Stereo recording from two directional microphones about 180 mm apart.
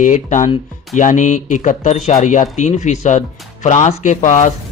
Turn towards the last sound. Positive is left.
turn(degrees=40)  # may be behind; listen again after turning